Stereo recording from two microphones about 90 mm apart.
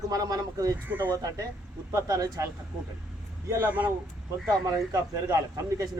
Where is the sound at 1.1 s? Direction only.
40° right (ahead or behind).